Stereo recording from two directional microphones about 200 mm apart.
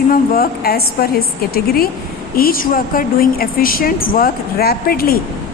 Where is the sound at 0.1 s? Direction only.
50° left (ahead or behind).